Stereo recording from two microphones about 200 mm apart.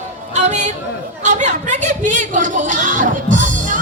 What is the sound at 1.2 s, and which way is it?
Speech, 35° right (ahead or behind).